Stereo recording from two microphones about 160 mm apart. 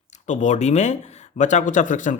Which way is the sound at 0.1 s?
50° left (ahead or behind).